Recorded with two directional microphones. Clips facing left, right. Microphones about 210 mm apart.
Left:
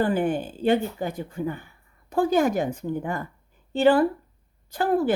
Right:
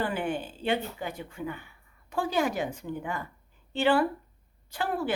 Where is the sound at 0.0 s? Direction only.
40° left (ahead or behind).